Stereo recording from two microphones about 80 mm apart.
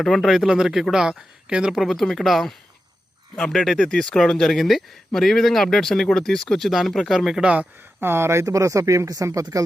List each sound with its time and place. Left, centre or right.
0.0 s speech: centre
1.7 s speech: centre
8.0 s speech: right